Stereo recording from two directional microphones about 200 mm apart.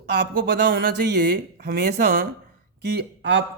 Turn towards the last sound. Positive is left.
turn(degrees=-60)  # may be behind; listen again after turning